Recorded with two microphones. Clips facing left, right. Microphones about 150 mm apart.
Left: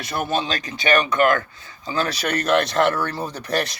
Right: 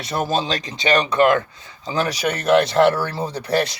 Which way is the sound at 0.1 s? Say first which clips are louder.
Right 2 dB; 30° right (ahead or behind).